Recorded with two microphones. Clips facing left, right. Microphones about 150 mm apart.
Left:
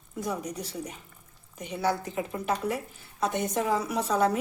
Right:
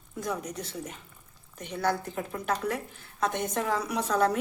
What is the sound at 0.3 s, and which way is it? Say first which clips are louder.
Speech: even; 10° left (ahead or behind).